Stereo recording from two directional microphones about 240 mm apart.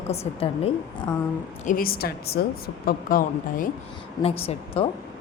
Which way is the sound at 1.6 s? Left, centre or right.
Left.